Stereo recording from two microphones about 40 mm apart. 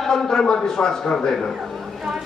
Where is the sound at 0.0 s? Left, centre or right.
Centre.